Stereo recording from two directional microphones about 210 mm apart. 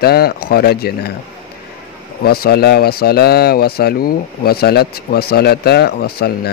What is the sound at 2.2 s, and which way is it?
Speech, 45° left (ahead or behind).